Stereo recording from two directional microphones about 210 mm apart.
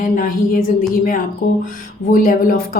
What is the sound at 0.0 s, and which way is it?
A woman's voice, 40° left (ahead or behind).